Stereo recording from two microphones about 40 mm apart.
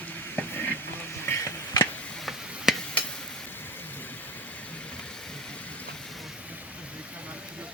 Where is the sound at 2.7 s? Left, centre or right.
Centre.